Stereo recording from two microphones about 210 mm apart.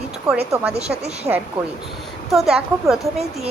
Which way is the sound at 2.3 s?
Centre (ahead or behind).